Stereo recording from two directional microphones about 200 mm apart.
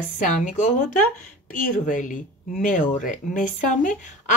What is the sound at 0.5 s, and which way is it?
Speech, 40° left (ahead or behind).